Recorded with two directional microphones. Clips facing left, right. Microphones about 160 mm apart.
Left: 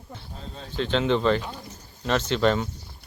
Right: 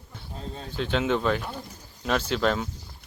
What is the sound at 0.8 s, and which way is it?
Speech, 5° right (ahead or behind).